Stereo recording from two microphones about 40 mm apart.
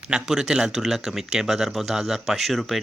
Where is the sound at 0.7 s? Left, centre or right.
Centre.